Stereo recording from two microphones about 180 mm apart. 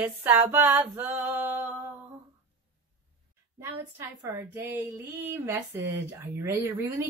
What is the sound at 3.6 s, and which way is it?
A woman's voice, 15° right (ahead or behind).